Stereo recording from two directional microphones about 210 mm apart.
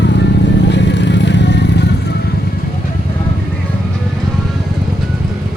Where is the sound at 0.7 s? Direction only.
55° left (ahead or behind).